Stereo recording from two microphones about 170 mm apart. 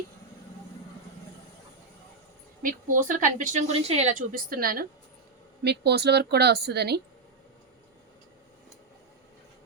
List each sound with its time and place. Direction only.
2.6 s speech: 50° right (ahead or behind)
5.6 s speech: 75° right (ahead or behind)